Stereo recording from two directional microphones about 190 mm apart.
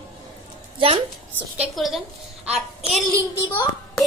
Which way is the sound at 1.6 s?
Centre (ahead or behind).